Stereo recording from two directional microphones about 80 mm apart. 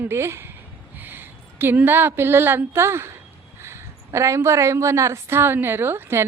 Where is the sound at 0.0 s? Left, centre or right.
Right.